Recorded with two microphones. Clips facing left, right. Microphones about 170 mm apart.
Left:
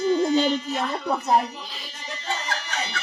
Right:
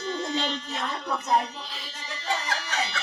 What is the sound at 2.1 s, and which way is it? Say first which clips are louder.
Music: even; 20° left (ahead or behind).